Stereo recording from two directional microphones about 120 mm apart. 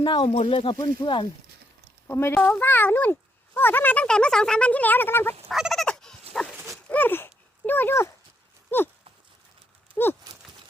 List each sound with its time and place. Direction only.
0.0 s speech: 40° left (ahead or behind)
0.8 s speech: 35° left (ahead or behind)
2.0 s a child's voice: 20° left (ahead or behind)
5.5 s fowl: centre (ahead or behind)
6.3 s dog: 10° left (ahead or behind)
6.8 s a sound: 15° left (ahead or behind)
7.7 s speech: 15° left (ahead or behind)
8.7 s a sound: 20° left (ahead or behind)
9.9 s horse: 15° left (ahead or behind)